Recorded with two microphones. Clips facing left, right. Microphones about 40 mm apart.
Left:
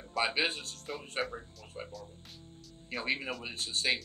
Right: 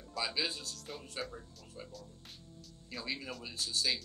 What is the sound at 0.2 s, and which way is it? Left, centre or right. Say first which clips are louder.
Speech: left 6 dB; left.